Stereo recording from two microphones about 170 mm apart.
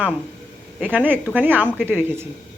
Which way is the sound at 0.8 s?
10° right (ahead or behind).